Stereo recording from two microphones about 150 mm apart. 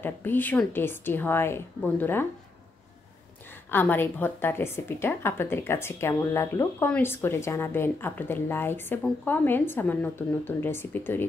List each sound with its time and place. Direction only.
0.0 s a woman's voice: 15° left (ahead or behind)
3.7 s a woman's voice: 15° left (ahead or behind)